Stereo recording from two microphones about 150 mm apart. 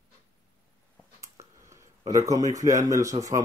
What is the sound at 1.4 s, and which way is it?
Speech, 20° right (ahead or behind).